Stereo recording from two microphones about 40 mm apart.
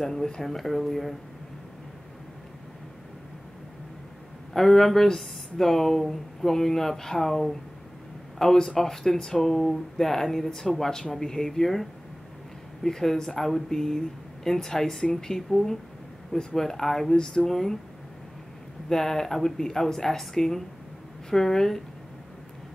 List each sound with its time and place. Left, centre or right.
0.0 s speech: centre
4.6 s speech: centre
18.9 s speech: centre